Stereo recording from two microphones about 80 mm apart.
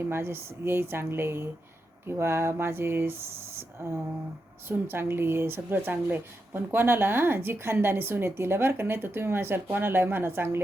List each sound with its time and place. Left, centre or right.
0.0 s speech: right
4.7 s speech: right